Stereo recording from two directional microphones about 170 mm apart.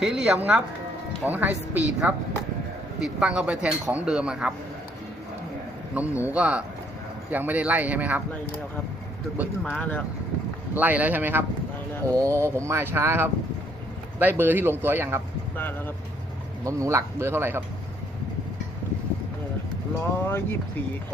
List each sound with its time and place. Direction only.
0.0 s speech: 5° right (ahead or behind)
5.9 s speech: 10° right (ahead or behind)
9.7 s speech: 10° left (ahead or behind)
10.8 s speech: 10° right (ahead or behind)
16.6 s speech: 20° right (ahead or behind)
20.2 s speech: 15° left (ahead or behind)